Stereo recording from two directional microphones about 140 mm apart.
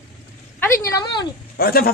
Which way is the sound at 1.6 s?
90° left.